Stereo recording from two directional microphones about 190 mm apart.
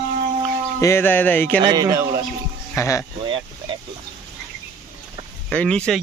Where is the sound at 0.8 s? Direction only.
10° left (ahead or behind).